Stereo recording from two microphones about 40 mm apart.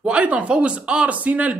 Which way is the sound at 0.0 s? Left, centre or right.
Right.